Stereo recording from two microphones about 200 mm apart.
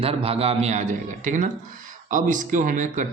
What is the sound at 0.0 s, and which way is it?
A man's voice, 30° right (ahead or behind).